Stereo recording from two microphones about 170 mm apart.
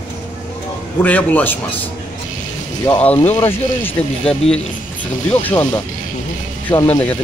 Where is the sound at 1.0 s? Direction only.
10° left (ahead or behind).